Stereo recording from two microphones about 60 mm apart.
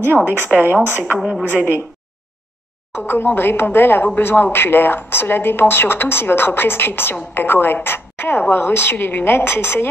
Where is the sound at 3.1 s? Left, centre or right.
Left.